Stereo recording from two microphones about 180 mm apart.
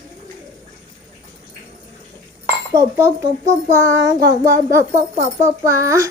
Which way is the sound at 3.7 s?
15° right (ahead or behind).